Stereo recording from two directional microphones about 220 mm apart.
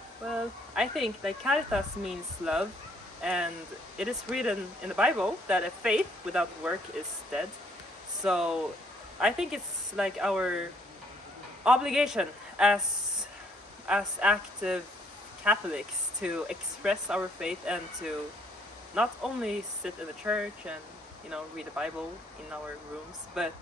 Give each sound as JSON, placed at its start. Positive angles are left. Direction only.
{"t": 0.3, "sound": "speech", "side_deg": 0}
{"t": 8.2, "sound": "speech", "side_deg": -5}
{"t": 11.6, "sound": "a man's voice", "side_deg": -5}
{"t": 13.8, "sound": "speech", "side_deg": -5}
{"t": 18.9, "sound": "speech", "side_deg": -5}
{"t": 23.4, "sound": "speech", "side_deg": -5}